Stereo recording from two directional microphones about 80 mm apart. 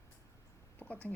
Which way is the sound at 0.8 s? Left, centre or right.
Centre.